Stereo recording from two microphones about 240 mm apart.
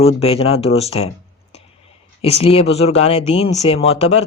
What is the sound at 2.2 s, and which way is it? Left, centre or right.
Speech, left.